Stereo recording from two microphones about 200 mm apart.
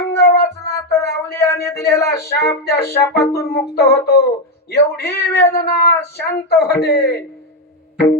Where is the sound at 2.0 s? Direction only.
55° left (ahead or behind).